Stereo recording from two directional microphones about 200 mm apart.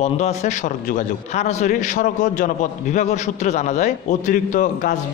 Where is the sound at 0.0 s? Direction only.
35° left (ahead or behind).